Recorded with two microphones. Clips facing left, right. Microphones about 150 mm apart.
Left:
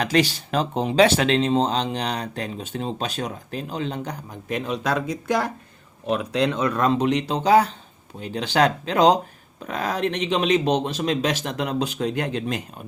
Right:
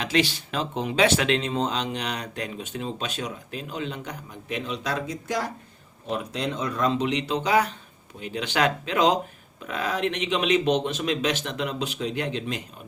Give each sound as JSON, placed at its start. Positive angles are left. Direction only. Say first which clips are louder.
{"t": 0.0, "sound": "speech", "louder": "left 4 dB", "side_deg": 40}
{"t": 6.1, "sound": "speech", "louder": "left 6 dB", "side_deg": 75}